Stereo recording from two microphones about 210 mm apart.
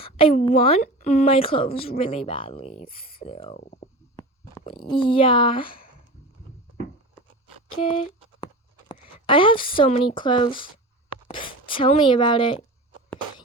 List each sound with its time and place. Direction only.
0.0 s a woman's voice: 25° left (ahead or behind)
5.6 s speech: 45° left (ahead or behind)
7.8 s a woman's voice: 25° left (ahead or behind)